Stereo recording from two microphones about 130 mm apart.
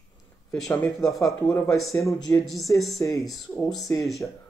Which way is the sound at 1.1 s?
25° left (ahead or behind).